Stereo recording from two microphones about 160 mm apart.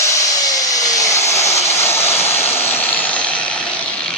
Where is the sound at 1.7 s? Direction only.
15° left (ahead or behind).